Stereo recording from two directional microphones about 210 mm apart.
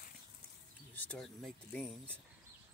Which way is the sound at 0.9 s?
5° left (ahead or behind).